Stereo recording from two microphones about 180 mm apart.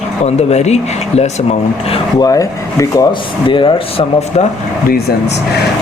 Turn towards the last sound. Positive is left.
turn(degrees=60)  # may be behind; listen again after turning